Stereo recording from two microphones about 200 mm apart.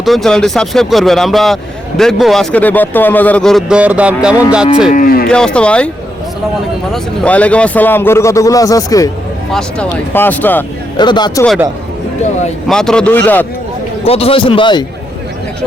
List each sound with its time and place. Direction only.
0.0 s a man's voice: centre (ahead or behind)
4.9 s speech: 45° left (ahead or behind)
5.3 s a man's voice: 5° left (ahead or behind)
6.9 s a man's voice: 5° left (ahead or behind)
9.5 s a man's voice: 5° left (ahead or behind)
10.9 s a man's voice: 20° left (ahead or behind)
12.6 s a man's voice: 5° left (ahead or behind)
14.0 s a man's voice: 30° left (ahead or behind)